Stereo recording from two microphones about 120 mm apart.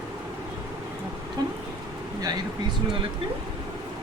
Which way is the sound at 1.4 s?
35° right (ahead or behind).